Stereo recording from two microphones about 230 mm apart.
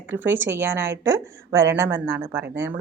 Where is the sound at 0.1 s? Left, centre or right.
Centre.